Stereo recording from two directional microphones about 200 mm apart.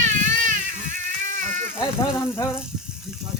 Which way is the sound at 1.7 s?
10° left (ahead or behind).